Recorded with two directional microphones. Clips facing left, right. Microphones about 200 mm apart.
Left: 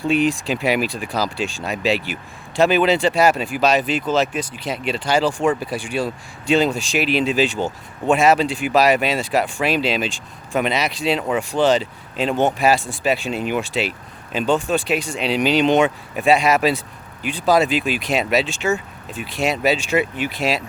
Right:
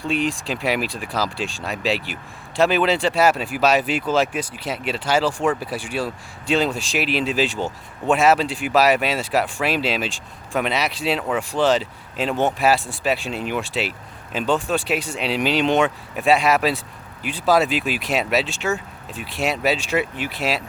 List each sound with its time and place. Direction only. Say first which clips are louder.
0.1 s speech: left 4 dB; centre (ahead or behind)